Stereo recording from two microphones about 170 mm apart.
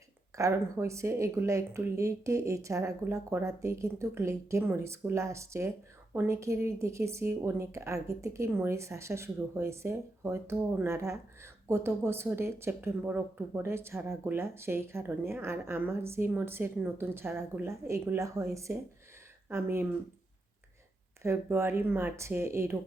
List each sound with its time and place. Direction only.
0.3 s speech: 15° right (ahead or behind)
21.2 s speech: 15° right (ahead or behind)